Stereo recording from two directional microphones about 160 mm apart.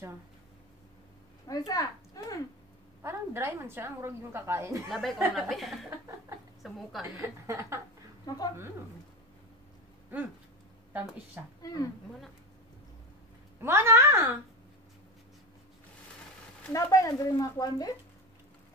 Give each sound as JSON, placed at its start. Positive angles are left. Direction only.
{"t": 1.7, "sound": "speech", "side_deg": 20}
{"t": 3.0, "sound": "a woman's voice", "side_deg": -15}
{"t": 4.8, "sound": "speech", "side_deg": 0}
{"t": 7.2, "sound": "a woman's voice", "side_deg": -15}
{"t": 8.3, "sound": "speech", "side_deg": 25}
{"t": 10.1, "sound": "a woman's voice", "side_deg": -10}
{"t": 11.6, "sound": "a woman's voice", "side_deg": 20}
{"t": 13.6, "sound": "a woman's voice", "side_deg": -15}
{"t": 16.7, "sound": "speech", "side_deg": 20}